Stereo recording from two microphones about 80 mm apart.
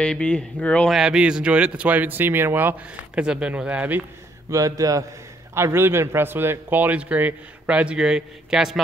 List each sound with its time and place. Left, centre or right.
0.0 s a man's voice: centre
0.8 s speech: centre; by 2.7 s right
3.2 s speech: centre
4.5 s speech: right
5.5 s a man's voice: right; by 8.8 s centre